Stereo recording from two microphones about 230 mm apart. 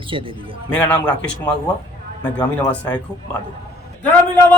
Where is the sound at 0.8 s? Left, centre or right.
Centre.